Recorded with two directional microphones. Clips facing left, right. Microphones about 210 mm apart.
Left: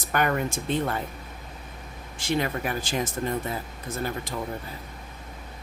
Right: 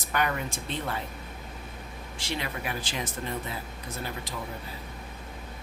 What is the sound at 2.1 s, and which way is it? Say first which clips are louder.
Speech: left 8 dB; 50° left (ahead or behind).